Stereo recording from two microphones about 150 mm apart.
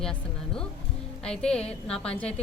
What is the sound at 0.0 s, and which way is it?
A woman's voice, 5° left (ahead or behind).